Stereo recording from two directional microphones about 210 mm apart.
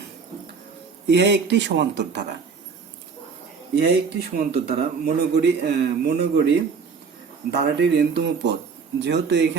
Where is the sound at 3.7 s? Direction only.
50° right (ahead or behind).